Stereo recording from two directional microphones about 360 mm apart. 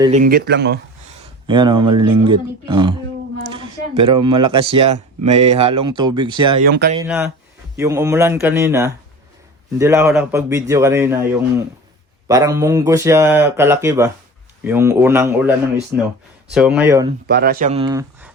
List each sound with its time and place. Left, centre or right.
0.0 s speech: centre
1.5 s speech: centre
6.7 s speech: right
7.0 s speech: centre
12.3 s speech: centre
17.2 s speech: right; by 18.3 s centre